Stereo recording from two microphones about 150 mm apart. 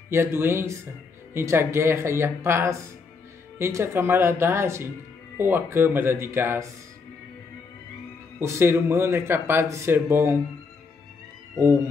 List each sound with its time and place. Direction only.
0.1 s a man's voice: 15° right (ahead or behind)
8.4 s a man's voice: 15° right (ahead or behind)
11.5 s a man's voice: 15° right (ahead or behind)